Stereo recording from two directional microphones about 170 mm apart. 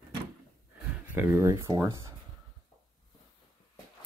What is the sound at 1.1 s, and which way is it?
Speech, 15° right (ahead or behind).